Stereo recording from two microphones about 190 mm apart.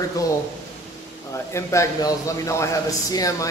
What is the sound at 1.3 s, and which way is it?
A man's voice, 15° left (ahead or behind).